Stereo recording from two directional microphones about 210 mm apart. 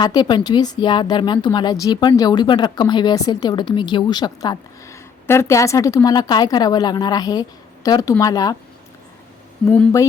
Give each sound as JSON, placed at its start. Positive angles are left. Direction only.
{"t": 0.0, "sound": "speech", "side_deg": 20}
{"t": 9.6, "sound": "speech", "side_deg": 15}